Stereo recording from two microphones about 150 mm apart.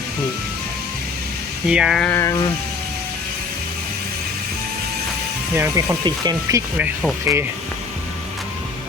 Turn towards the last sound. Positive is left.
turn(degrees=-5)  # may be behind; listen again after turning